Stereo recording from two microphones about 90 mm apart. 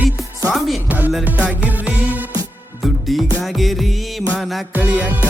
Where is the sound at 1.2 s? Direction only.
15° right (ahead or behind).